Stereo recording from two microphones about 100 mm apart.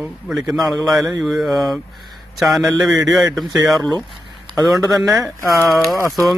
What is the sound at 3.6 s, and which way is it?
Speech, 40° right (ahead or behind).